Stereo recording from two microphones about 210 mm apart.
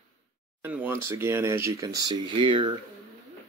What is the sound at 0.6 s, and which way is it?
Speech, 10° right (ahead or behind).